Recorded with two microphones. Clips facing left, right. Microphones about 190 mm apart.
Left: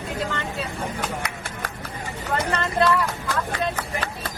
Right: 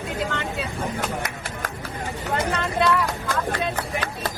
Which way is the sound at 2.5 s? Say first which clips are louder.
Left 4 dB; centre (ahead or behind).